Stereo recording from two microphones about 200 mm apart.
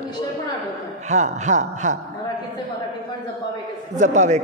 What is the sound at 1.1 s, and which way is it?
Speech, 35° right (ahead or behind).